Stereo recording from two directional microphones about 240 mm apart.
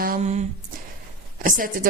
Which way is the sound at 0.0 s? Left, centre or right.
Right.